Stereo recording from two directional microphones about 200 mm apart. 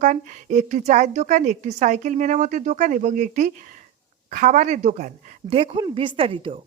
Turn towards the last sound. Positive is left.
turn(degrees=-30)  # may be behind; listen again after turning